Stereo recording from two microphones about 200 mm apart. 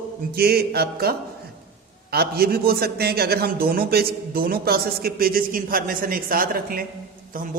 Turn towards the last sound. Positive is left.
turn(degrees=-45)  # may be behind; listen again after turning